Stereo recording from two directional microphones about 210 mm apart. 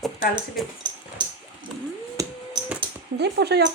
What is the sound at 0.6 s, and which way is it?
Speech, centre (ahead or behind).